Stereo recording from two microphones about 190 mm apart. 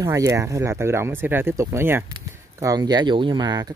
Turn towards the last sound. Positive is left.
turn(degrees=-20)  # may be behind; listen again after turning